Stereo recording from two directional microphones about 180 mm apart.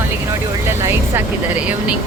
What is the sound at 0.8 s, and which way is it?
Speech, 10° right (ahead or behind).